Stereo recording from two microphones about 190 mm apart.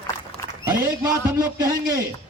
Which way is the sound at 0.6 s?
20° right (ahead or behind).